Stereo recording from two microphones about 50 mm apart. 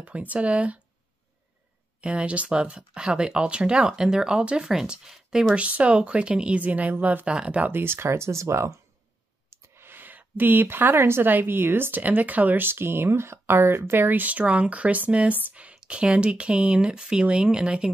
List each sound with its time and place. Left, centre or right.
0.0 s speech: right
2.0 s speech: right
5.6 s speech: right
7.7 s speech: right
9.8 s speech: right
12.6 s speech: right; by 17.9 s centre